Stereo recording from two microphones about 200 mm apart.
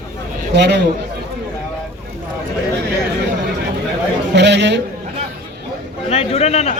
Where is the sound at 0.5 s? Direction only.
60° right (ahead or behind).